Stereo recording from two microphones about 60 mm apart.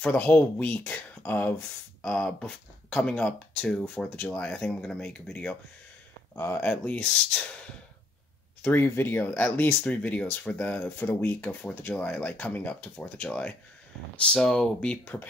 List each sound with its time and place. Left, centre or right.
0.0 s speech: left
2.0 s a sound: centre
2.4 s speech: centre
6.3 s speech: left
6.6 s speech: left
8.6 s speech: left
14.1 s speech: centre